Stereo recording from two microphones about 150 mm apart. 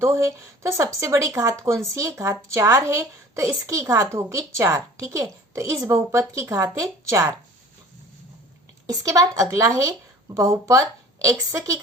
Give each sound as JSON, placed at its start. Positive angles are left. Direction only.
{"t": 0.0, "sound": "speech", "side_deg": -20}
{"t": 8.9, "sound": "speech", "side_deg": -20}